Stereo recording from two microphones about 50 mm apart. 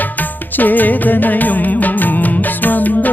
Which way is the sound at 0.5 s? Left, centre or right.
Left.